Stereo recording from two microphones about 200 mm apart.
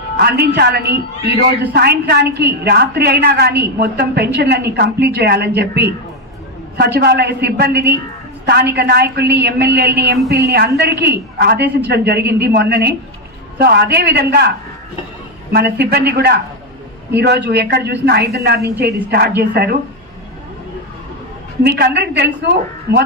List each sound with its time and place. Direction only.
0.2 s a woman's voice: 55° right (ahead or behind)
15.5 s a woman's voice: 55° right (ahead or behind)
21.6 s a woman's voice: 55° right (ahead or behind)